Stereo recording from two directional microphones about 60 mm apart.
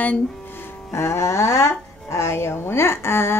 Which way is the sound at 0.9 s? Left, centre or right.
Left.